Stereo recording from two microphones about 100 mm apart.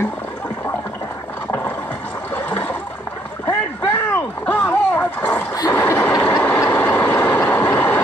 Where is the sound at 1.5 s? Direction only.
20° left (ahead or behind).